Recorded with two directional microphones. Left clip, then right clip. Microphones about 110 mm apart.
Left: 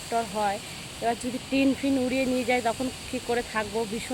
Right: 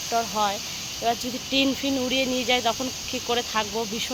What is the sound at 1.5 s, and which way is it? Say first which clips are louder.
Speech: right 1 dB; 15° left (ahead or behind).